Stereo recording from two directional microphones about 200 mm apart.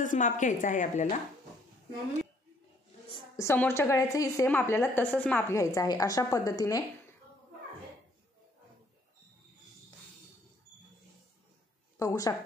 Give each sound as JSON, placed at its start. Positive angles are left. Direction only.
{"t": 0.0, "sound": "a woman's voice", "side_deg": 40}
{"t": 3.3, "sound": "a woman's voice", "side_deg": 15}
{"t": 12.0, "sound": "a woman's voice", "side_deg": 15}